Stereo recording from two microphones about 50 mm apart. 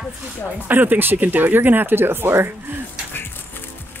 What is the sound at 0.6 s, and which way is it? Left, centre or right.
Speech, right.